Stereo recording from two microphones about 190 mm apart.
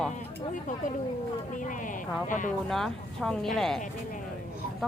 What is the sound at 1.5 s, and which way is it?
Speech, 45° left (ahead or behind).